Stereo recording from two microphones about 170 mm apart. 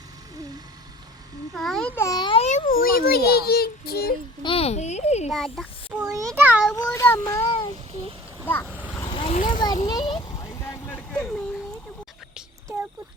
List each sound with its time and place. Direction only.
1.5 s a child's voice: centre (ahead or behind)
2.0 s a sound: 25° left (ahead or behind)
2.4 s a child's voice: 45° left (ahead or behind); by 4.1 s 65° left (ahead or behind)
4.4 s speech: 35° left (ahead or behind)
5.3 s a child's voice: centre (ahead or behind)
6.7 s a child's voice: 15° left (ahead or behind)
7.4 s speech: 30° left (ahead or behind)
9.2 s vehicle: 30° left (ahead or behind); by 11.4 s 5° left (ahead or behind)